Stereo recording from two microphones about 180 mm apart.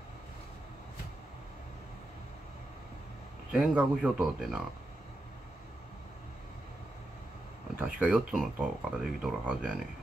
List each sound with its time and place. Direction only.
3.5 s speech: centre (ahead or behind)
7.8 s speech: 5° right (ahead or behind)